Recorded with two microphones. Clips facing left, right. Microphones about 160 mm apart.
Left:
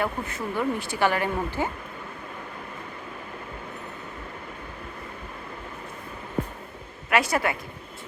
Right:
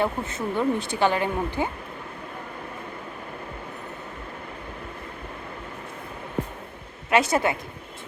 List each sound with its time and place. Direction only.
0.0 s speech: 20° right (ahead or behind)
7.1 s speech: 20° right (ahead or behind)